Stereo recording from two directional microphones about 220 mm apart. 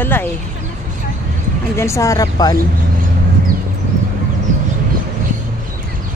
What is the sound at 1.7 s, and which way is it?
Speech, 15° left (ahead or behind).